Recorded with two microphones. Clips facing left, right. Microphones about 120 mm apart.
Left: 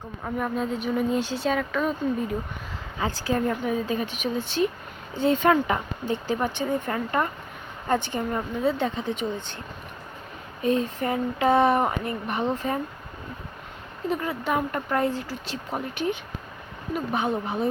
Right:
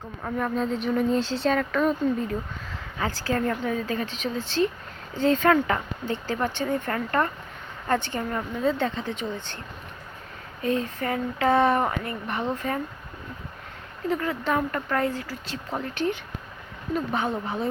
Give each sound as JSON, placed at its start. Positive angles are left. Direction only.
{"t": 0.3, "sound": "speech", "side_deg": 10}
{"t": 3.0, "sound": "speech", "side_deg": 15}
{"t": 10.6, "sound": "speech", "side_deg": 20}
{"t": 14.1, "sound": "speech", "side_deg": 15}